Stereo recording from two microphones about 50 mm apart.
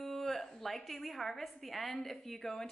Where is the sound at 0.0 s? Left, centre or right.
Centre.